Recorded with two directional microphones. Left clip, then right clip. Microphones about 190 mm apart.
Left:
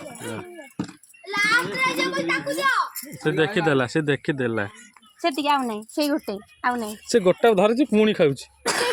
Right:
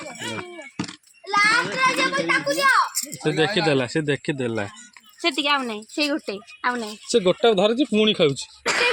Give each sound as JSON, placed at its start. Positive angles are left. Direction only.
{"t": 1.2, "sound": "children playing", "side_deg": -35}
{"t": 2.0, "sound": "a child's voice", "side_deg": -30}
{"t": 3.2, "sound": "speech", "side_deg": 5}
{"t": 5.2, "sound": "a woman's voice", "side_deg": 60}
{"t": 7.1, "sound": "speech", "side_deg": 5}
{"t": 8.6, "sound": "throat clearing", "side_deg": 35}